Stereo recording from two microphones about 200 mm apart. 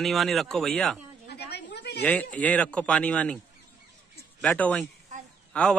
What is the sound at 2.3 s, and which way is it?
A man's voice, 5° left (ahead or behind).